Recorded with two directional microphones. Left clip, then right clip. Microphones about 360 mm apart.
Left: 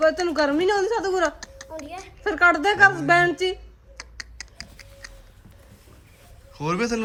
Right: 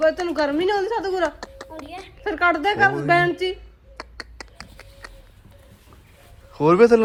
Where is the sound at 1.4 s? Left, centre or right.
Centre.